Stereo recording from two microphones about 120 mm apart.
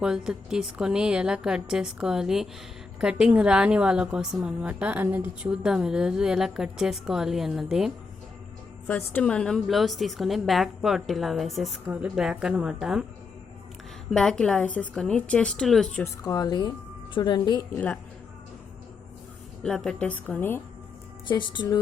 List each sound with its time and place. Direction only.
0.0 s a woman's voice: 5° right (ahead or behind)
8.9 s a woman's voice: 20° left (ahead or behind)
9.2 s a woman's voice: 5° left (ahead or behind)
11.9 s a woman's voice: 10° right (ahead or behind)
14.1 s a woman's voice: 5° left (ahead or behind)
16.2 s speech: 30° left (ahead or behind)
19.6 s a woman's voice: 5° left (ahead or behind)
21.2 s speech: 40° left (ahead or behind)